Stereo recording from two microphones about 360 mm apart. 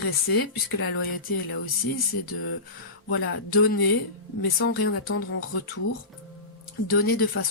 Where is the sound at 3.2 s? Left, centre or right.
Left.